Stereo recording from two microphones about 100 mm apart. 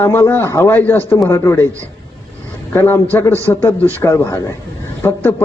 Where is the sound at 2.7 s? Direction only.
20° left (ahead or behind).